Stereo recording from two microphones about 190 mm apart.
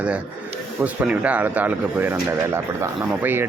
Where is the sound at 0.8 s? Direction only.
10° right (ahead or behind).